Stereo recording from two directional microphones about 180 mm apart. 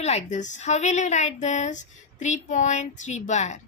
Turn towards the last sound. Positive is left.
turn(degrees=40)  # may be behind; listen again after turning